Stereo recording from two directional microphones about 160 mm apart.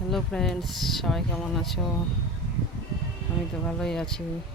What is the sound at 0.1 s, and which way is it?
Speech, 5° left (ahead or behind).